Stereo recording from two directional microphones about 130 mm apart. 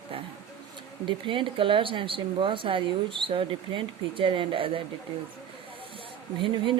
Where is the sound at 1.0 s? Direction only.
40° right (ahead or behind).